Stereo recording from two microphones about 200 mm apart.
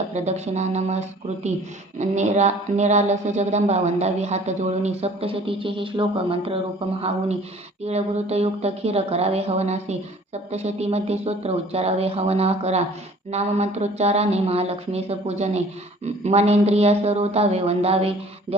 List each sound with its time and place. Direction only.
0.1 s speech: 35° right (ahead or behind)
7.9 s speech: 30° right (ahead or behind)